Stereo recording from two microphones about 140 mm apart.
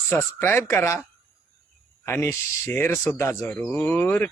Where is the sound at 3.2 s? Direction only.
20° left (ahead or behind).